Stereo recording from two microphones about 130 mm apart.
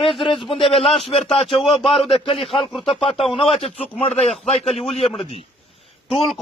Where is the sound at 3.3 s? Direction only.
50° left (ahead or behind).